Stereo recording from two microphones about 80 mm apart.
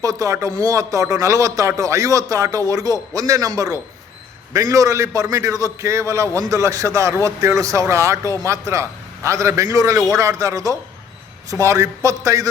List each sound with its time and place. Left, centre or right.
0.0 s a man's voice: right